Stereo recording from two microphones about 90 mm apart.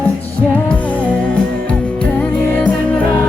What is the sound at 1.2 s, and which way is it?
Music, 10° left (ahead or behind).